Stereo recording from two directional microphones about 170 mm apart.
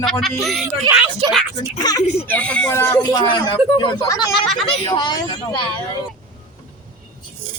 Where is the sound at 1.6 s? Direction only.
25° left (ahead or behind).